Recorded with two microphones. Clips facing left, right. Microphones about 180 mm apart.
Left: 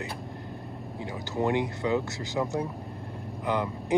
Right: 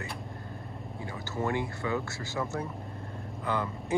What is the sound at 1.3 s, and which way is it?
Speech, 15° left (ahead or behind).